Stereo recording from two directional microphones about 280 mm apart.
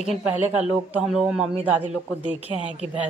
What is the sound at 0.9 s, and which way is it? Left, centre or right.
Speech, centre.